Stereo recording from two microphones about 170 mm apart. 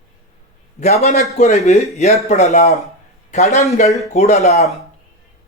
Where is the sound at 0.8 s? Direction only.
40° left (ahead or behind).